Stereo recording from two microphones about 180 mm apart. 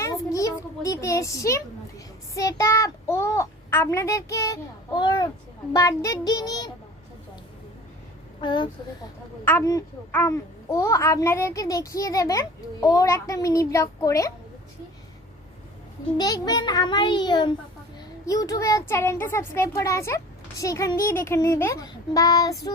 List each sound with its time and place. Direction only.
0.0 s a sound: 15° left (ahead or behind)
2.3 s a child's voice: 15° left (ahead or behind)
8.4 s a child's voice: 25° left (ahead or behind)
9.4 s speech: 10° left (ahead or behind)
16.1 s a child's voice: 20° left (ahead or behind)